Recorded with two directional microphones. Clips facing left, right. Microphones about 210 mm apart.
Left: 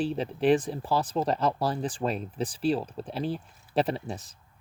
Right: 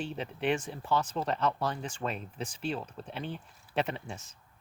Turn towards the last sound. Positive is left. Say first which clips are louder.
# left 7 dB
turn(degrees=35)  # may be behind; listen again after turning